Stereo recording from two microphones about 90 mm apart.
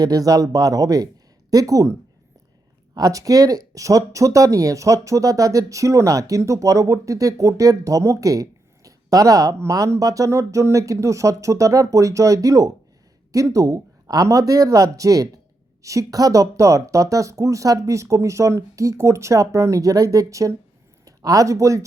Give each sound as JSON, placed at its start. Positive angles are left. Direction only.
{"t": 0.0, "sound": "speech", "side_deg": -45}